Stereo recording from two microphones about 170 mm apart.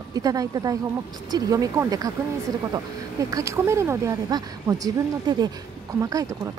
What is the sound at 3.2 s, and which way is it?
A woman's voice, 20° right (ahead or behind).